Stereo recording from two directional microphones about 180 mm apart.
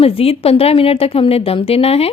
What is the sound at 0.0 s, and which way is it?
A woman's voice, 30° left (ahead or behind).